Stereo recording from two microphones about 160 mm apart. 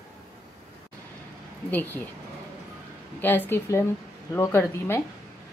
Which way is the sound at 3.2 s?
10° left (ahead or behind).